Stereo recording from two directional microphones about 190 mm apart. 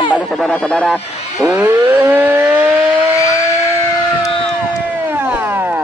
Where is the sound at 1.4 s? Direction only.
10° right (ahead or behind).